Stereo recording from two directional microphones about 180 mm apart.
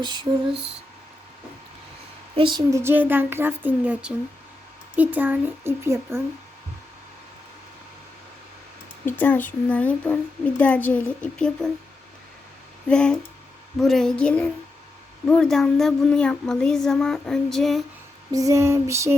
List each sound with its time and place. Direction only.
2.3 s speech: 25° right (ahead or behind)
9.0 s a woman's voice: 10° left (ahead or behind)
12.9 s speech: 5° left (ahead or behind)
18.3 s speech: 20° right (ahead or behind)